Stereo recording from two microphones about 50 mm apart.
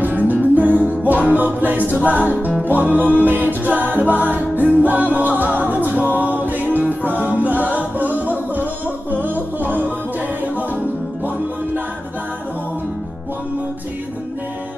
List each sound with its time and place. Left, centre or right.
0.0 s music: right